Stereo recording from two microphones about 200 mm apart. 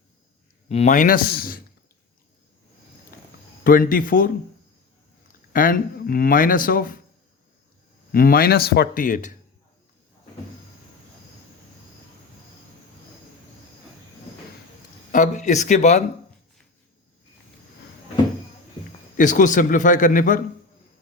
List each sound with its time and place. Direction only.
0.7 s speech: 35° left (ahead or behind)
3.1 s a sound: 45° left (ahead or behind)
3.6 s speech: 45° left (ahead or behind)
5.5 s speech: 45° left (ahead or behind)
8.1 s speech: 45° left (ahead or behind)
15.1 s a man's voice: 40° left (ahead or behind)
19.1 s a man's voice: 40° left (ahead or behind)